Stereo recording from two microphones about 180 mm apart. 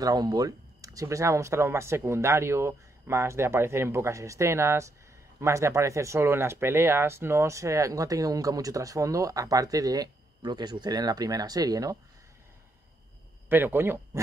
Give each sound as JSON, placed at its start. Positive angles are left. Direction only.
{"t": 0.0, "sound": "speech", "side_deg": -20}
{"t": 13.5, "sound": "speech", "side_deg": -10}